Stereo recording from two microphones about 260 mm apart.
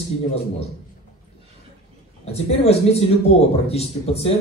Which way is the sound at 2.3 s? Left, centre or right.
Left.